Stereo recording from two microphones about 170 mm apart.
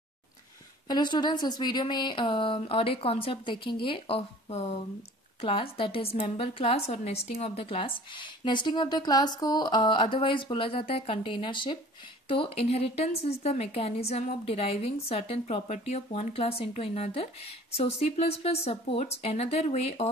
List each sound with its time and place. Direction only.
0.8 s a woman's voice: 25° left (ahead or behind)